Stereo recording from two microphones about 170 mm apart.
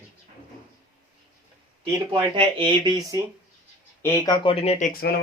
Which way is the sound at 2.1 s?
30° right (ahead or behind).